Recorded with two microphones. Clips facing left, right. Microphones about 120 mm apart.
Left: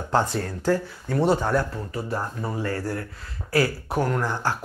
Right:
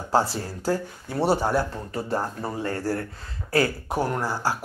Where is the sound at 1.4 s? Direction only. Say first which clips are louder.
Even; 30° right (ahead or behind).